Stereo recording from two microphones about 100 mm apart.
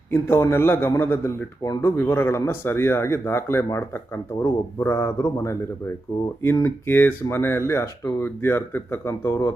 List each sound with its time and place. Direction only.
0.1 s speech: 25° left (ahead or behind)